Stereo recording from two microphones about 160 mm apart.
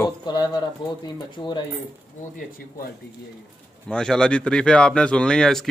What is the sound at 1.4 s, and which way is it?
Speech, 35° left (ahead or behind).